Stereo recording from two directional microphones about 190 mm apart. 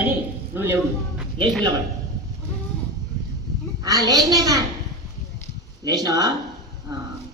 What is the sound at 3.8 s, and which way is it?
Speech, 20° right (ahead or behind).